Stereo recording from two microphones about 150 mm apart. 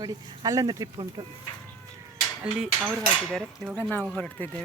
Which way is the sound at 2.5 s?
10° right (ahead or behind).